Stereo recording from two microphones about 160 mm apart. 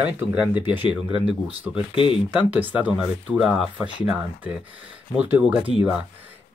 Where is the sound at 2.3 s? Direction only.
10° right (ahead or behind).